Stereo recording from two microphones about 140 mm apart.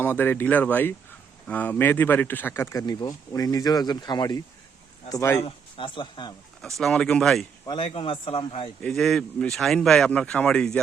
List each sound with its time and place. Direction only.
0.0 s speech: 15° left (ahead or behind)
5.4 s speech: 40° left (ahead or behind)
6.6 s speech: centre (ahead or behind)
7.7 s speech: 45° left (ahead or behind)
8.8 s speech: 5° left (ahead or behind)